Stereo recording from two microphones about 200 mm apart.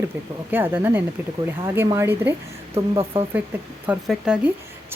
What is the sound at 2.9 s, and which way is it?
Speech, 30° right (ahead or behind).